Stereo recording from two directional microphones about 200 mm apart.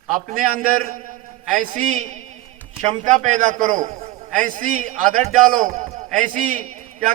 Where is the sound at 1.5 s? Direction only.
40° right (ahead or behind).